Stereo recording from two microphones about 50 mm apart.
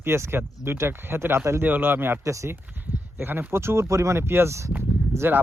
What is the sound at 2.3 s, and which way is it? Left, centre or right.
Speech, right.